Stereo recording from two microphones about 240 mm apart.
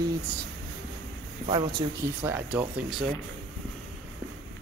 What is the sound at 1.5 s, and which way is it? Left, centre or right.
Speech, centre.